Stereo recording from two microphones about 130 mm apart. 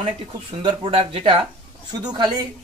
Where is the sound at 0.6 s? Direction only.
45° right (ahead or behind).